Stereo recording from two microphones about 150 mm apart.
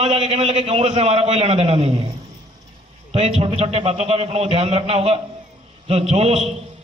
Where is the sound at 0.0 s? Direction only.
45° right (ahead or behind).